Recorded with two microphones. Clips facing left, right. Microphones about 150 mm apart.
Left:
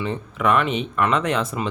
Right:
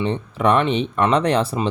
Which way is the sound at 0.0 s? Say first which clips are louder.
Right 3 dB; 35° right (ahead or behind).